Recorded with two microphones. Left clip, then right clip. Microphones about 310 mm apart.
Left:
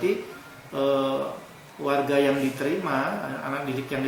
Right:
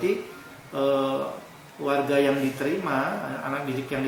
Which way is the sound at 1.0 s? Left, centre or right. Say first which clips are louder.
Even; left.